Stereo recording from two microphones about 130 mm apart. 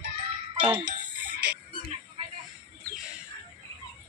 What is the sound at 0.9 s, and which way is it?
Music, 90° right.